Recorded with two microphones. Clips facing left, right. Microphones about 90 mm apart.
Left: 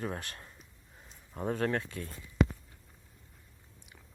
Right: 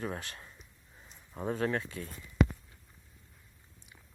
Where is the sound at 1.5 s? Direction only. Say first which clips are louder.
Even; 45° left (ahead or behind).